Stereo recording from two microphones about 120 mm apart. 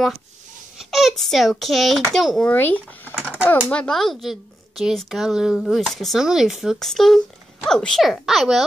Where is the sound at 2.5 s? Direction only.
15° left (ahead or behind).